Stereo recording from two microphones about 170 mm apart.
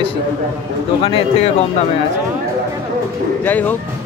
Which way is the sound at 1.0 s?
30° left (ahead or behind).